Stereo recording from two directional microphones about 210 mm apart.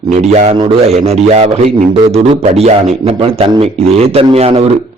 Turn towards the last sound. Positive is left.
turn(degrees=-30)  # may be behind; listen again after turning